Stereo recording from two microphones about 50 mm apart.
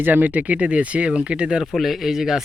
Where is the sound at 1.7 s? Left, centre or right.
Centre.